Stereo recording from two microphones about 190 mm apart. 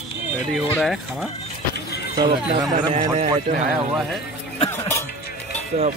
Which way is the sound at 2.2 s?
20° right (ahead or behind).